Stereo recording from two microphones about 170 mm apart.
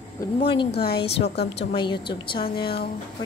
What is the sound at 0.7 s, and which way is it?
Speech, 70° left (ahead or behind).